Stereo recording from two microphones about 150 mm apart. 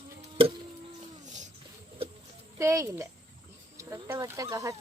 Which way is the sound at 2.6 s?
20° right (ahead or behind).